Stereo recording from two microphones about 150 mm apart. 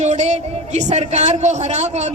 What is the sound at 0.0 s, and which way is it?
A man's voice, 50° right (ahead or behind).